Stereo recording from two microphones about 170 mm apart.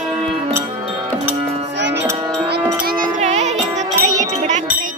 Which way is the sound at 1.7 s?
90° right.